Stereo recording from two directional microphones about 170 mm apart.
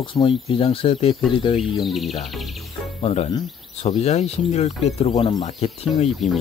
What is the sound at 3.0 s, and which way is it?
Speech, 40° left (ahead or behind).